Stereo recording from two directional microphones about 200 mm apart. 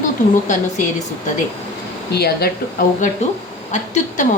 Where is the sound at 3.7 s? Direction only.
35° left (ahead or behind).